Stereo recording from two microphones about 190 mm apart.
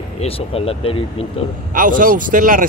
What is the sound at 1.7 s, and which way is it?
Speech, 45° right (ahead or behind).